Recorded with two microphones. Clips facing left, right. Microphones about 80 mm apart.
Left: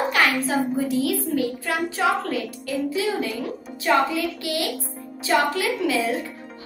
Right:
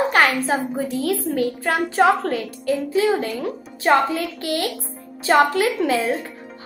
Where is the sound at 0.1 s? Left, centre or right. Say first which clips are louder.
Right 3 dB; right.